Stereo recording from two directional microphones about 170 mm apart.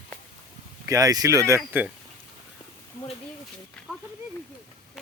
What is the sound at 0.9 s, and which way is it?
Speech, 20° right (ahead or behind).